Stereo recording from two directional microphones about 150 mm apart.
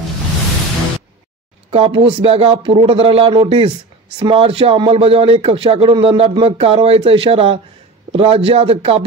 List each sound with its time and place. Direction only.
1.7 s speech: 40° right (ahead or behind)